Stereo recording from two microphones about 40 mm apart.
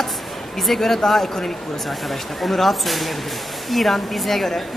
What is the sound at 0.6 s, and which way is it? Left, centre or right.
Speech, centre.